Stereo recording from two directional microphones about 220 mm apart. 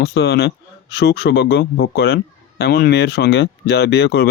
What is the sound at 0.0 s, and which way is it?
A man's voice, 50° left (ahead or behind).